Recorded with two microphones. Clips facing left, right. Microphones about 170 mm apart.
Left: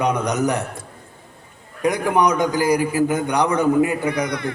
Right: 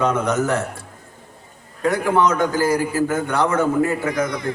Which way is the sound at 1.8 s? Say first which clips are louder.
Even; 15° left (ahead or behind).